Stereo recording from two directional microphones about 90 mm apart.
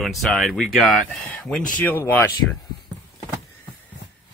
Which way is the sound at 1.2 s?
15° left (ahead or behind).